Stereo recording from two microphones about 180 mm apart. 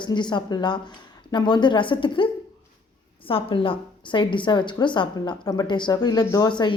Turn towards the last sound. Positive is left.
turn(degrees=25)  # may be behind; listen again after turning